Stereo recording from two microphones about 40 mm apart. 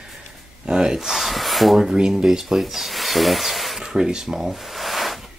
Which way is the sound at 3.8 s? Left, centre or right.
Centre.